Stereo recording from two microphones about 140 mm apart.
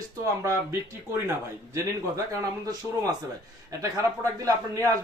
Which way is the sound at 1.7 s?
20° right (ahead or behind).